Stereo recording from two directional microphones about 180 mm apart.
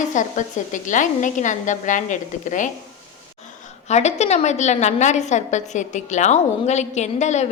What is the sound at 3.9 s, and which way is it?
A woman's voice, 40° left (ahead or behind).